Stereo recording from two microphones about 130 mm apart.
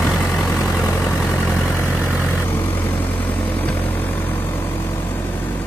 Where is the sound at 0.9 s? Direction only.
10° left (ahead or behind).